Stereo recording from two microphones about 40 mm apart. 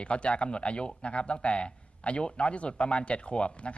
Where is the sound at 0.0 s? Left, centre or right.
Left.